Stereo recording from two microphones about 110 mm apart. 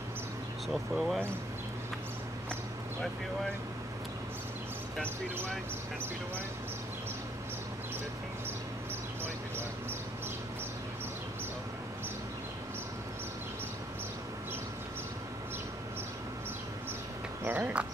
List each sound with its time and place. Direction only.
0.9 s speech: centre (ahead or behind)
5.0 s speech: 20° right (ahead or behind)
17.5 s a sound: 15° right (ahead or behind)